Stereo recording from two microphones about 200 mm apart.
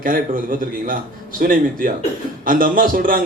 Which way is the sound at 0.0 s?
45° right (ahead or behind).